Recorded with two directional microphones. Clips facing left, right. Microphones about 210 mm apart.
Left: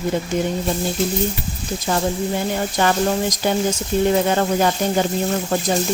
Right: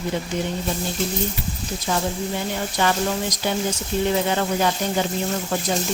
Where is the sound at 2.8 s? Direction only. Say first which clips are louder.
Left 3 dB; 45° left (ahead or behind).